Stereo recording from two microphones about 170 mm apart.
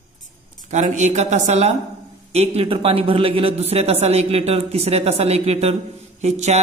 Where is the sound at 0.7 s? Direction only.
45° right (ahead or behind).